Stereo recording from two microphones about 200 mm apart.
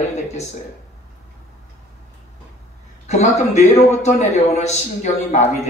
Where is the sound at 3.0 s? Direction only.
35° left (ahead or behind).